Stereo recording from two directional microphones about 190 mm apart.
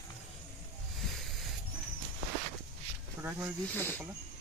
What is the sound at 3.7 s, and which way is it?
Speech, 10° left (ahead or behind).